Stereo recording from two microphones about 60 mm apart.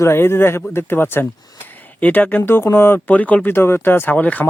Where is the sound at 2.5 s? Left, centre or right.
Left.